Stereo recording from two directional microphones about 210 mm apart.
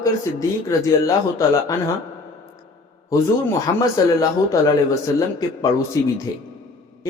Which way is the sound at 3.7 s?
15° left (ahead or behind).